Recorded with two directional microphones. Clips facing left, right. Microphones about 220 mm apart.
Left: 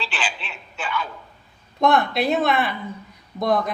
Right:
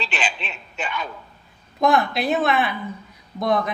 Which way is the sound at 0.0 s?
20° right (ahead or behind).